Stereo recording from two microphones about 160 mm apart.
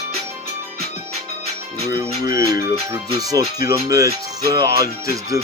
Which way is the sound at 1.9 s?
20° right (ahead or behind).